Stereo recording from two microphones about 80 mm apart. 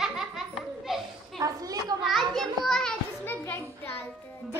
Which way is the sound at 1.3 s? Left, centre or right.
Right.